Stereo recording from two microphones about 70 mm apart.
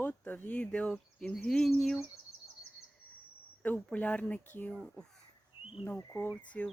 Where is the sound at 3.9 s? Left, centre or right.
Centre.